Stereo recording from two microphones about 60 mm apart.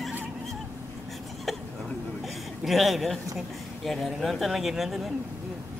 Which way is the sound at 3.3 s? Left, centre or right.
Centre.